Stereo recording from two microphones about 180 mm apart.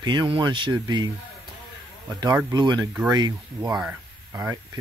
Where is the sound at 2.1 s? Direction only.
25° right (ahead or behind).